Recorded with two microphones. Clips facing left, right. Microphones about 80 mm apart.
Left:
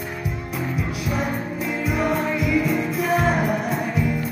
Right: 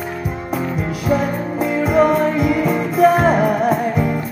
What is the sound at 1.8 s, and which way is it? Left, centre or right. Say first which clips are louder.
Music: right 9 dB; right.